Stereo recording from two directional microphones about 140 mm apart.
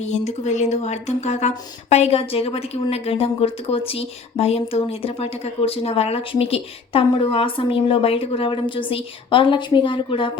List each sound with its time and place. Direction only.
0.0 s speech: 55° left (ahead or behind); by 10.3 s 35° left (ahead or behind)